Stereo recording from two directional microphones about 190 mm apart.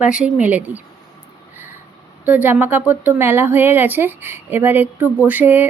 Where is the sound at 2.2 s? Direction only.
10° right (ahead or behind).